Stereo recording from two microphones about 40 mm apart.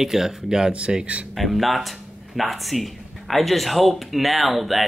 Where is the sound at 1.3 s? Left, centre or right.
Centre.